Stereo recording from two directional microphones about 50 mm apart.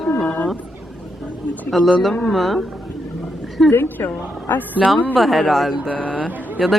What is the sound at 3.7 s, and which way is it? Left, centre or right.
Speech, left.